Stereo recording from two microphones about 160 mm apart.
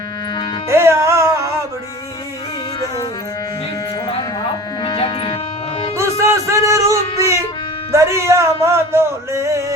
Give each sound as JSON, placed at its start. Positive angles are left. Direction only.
{"t": 0.7, "sound": "music", "side_deg": -15}
{"t": 4.8, "sound": "dog", "side_deg": 30}
{"t": 6.0, "sound": "music", "side_deg": -20}
{"t": 7.9, "sound": "a sound", "side_deg": -15}